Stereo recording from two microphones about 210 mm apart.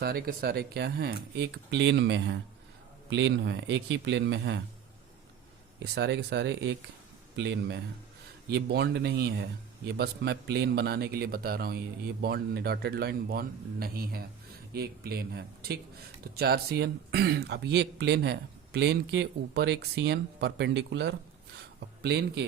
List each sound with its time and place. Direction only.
0.0 s a man's voice: 45° right (ahead or behind)
5.8 s a man's voice: 50° right (ahead or behind)